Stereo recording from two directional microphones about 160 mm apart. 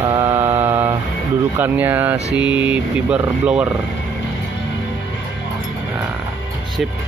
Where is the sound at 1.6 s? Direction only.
10° right (ahead or behind).